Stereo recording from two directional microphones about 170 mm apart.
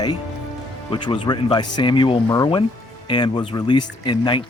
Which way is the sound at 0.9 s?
30° left (ahead or behind).